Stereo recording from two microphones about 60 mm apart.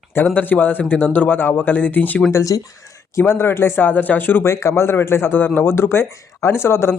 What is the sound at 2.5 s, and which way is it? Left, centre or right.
Speech, left.